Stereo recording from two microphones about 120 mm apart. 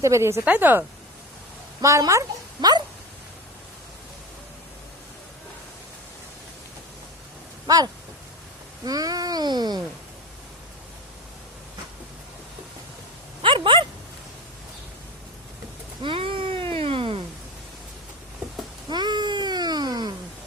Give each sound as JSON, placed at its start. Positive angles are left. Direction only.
{"t": 0.0, "sound": "speech", "side_deg": -25}
{"t": 1.8, "sound": "a woman's voice", "side_deg": -25}
{"t": 8.8, "sound": "speech", "side_deg": -30}
{"t": 13.4, "sound": "speech", "side_deg": -45}
{"t": 16.0, "sound": "cat", "side_deg": -45}
{"t": 18.9, "sound": "a sound", "side_deg": -40}